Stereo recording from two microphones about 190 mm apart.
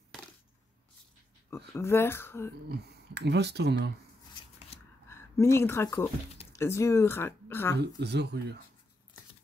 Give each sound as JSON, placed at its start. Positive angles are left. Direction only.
{"t": 1.8, "sound": "speech", "side_deg": 15}
{"t": 2.7, "sound": "speech", "side_deg": -60}
{"t": 4.7, "sound": "a sound", "side_deg": 30}
{"t": 5.0, "sound": "a sound", "side_deg": 15}
{"t": 6.5, "sound": "speech", "side_deg": 15}
{"t": 7.7, "sound": "speech", "side_deg": -60}